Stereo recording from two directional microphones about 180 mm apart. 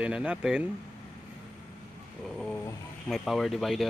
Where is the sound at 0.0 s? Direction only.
5° right (ahead or behind).